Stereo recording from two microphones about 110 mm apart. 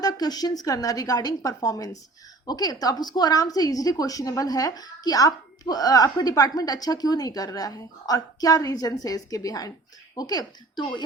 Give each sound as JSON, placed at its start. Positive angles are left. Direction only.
{"t": 0.0, "sound": "a woman's voice", "side_deg": 35}